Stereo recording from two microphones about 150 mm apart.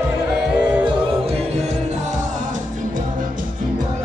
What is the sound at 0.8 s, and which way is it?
Music, 45° right (ahead or behind).